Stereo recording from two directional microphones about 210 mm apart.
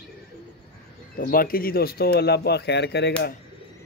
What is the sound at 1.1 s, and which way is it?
Speech, 45° left (ahead or behind).